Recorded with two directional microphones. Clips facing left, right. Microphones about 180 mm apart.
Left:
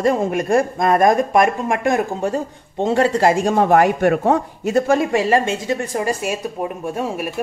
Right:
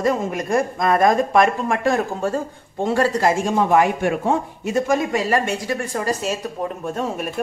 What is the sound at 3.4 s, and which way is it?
Speech, 55° left (ahead or behind).